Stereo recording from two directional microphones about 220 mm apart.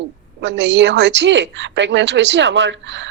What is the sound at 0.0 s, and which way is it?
A woman's voice, 55° right (ahead or behind).